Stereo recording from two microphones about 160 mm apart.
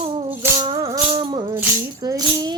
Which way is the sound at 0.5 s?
25° right (ahead or behind).